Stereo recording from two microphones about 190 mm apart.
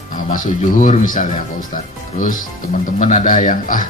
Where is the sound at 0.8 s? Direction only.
40° left (ahead or behind).